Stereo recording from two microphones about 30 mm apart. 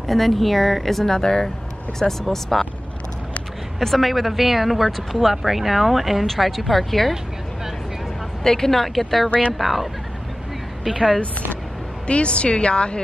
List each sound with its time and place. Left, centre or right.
0.0 s speech: centre
1.0 s speech: centre
3.8 s speech: centre
6.2 s a woman's voice: centre
8.5 s a woman's voice: centre
12.1 s a woman's voice: left